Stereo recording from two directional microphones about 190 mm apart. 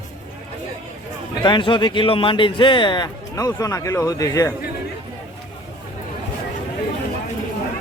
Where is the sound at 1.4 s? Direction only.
25° left (ahead or behind).